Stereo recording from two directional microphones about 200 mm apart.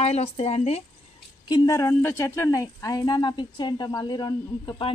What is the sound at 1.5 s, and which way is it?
Speech, 15° left (ahead or behind).